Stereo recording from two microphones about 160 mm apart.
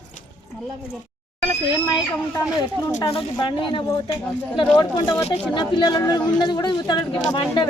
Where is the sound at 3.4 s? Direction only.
30° left (ahead or behind).